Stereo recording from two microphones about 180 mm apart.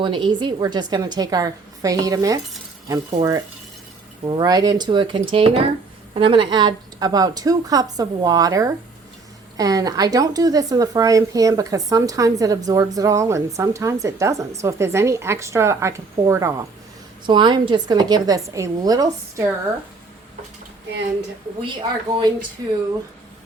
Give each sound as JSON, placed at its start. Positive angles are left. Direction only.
{"t": 0.0, "sound": "speech", "side_deg": -25}
{"t": 21.6, "sound": "speech", "side_deg": -25}